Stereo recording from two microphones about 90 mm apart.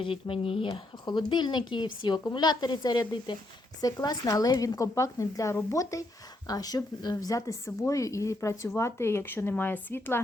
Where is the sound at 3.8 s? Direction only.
45° left (ahead or behind).